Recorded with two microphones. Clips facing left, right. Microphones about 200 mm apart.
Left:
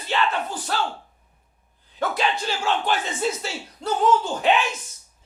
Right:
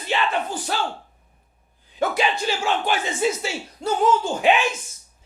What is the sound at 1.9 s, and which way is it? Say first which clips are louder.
Speech: right 2 dB; 10° right (ahead or behind).